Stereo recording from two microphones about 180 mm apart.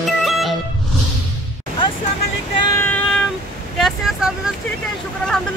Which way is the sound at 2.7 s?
10° left (ahead or behind).